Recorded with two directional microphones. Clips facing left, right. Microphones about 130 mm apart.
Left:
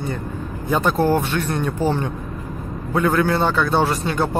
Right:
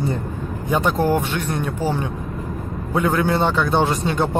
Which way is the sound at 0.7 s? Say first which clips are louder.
Left 1 dB; 15° right (ahead or behind).